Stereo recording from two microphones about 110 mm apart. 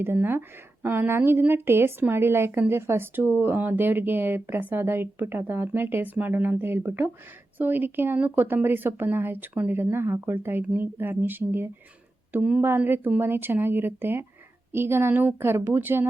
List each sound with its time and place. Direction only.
0.0 s a woman's voice: 20° right (ahead or behind)